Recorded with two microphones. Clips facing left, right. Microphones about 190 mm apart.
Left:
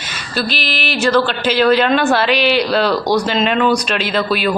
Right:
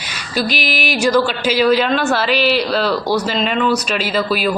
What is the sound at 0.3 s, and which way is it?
Speech, 15° right (ahead or behind).